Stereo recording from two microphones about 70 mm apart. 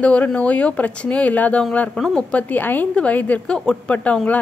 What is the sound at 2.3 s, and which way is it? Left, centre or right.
A woman's voice, left.